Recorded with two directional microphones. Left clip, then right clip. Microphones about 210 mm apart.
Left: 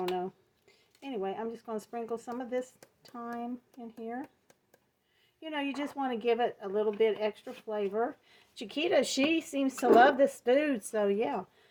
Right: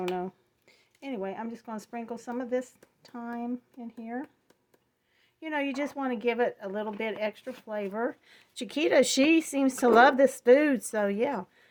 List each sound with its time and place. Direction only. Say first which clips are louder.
1.0 s speech: even; 45° right (ahead or behind)
5.4 s speech: right 4 dB; 45° right (ahead or behind)